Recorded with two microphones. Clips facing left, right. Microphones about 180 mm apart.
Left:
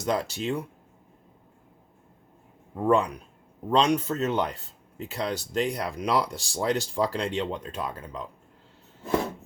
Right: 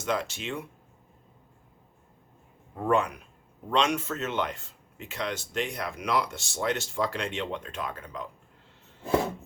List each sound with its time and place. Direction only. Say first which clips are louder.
0.0 s speech: left 3 dB; 40° left (ahead or behind)
2.9 s speech: left 2 dB; 35° left (ahead or behind)